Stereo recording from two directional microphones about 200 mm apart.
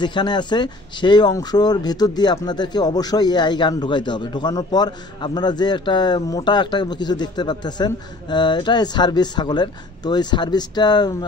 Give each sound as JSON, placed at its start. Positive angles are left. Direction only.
{"t": 0.0, "sound": "speech", "side_deg": 20}